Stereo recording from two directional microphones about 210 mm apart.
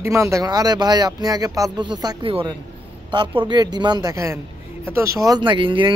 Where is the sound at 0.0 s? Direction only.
15° right (ahead or behind).